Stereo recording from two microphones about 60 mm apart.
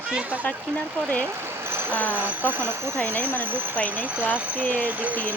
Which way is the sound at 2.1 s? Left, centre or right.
Right.